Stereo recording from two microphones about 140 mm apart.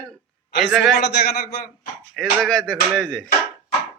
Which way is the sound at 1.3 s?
90° left.